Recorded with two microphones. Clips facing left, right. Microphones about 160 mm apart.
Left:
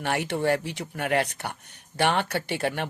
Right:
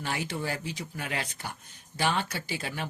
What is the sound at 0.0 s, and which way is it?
Speech, 65° left (ahead or behind).